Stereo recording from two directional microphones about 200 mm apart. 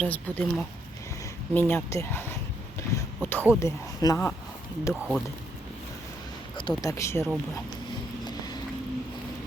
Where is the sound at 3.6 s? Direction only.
15° left (ahead or behind).